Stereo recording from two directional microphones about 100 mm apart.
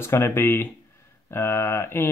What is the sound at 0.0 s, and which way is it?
Speech, 25° left (ahead or behind).